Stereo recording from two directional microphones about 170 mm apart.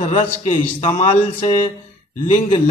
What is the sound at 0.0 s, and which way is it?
A man's voice, 40° left (ahead or behind).